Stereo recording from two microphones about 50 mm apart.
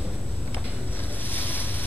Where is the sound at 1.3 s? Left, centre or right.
Left.